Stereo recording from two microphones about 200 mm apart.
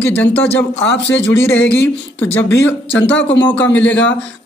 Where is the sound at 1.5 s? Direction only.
10° left (ahead or behind).